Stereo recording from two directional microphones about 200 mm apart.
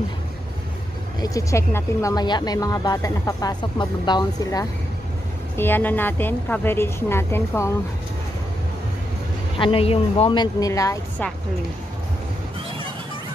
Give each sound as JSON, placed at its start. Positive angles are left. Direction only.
{"t": 1.2, "sound": "speech", "side_deg": 15}
{"t": 5.6, "sound": "a woman's voice", "side_deg": 10}
{"t": 9.6, "sound": "speech", "side_deg": 25}